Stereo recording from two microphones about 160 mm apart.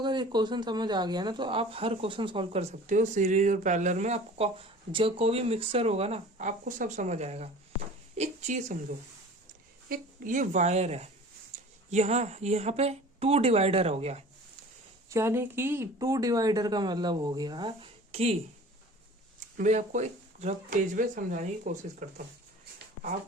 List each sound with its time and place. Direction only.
0.0 s a woman's voice: 30° right (ahead or behind); by 8.8 s 45° right (ahead or behind)
9.9 s a woman's voice: 55° right (ahead or behind)
15.1 s speech: 15° right (ahead or behind); by 18.3 s 40° right (ahead or behind)
19.5 s speech: 50° right (ahead or behind)